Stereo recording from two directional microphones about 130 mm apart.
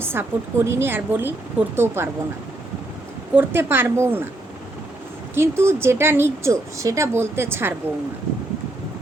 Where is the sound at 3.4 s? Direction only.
15° right (ahead or behind).